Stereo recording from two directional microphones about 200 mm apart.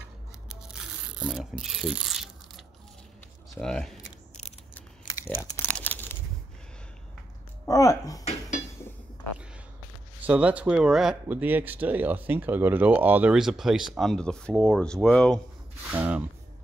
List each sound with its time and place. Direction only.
0.5 s a sound: 5° right (ahead or behind)
3.5 s speech: 5° left (ahead or behind)
4.7 s crumpling: 10° left (ahead or behind)
7.6 s speech: 15° left (ahead or behind)
10.2 s speech: 5° right (ahead or behind)
15.9 s speech: 10° right (ahead or behind)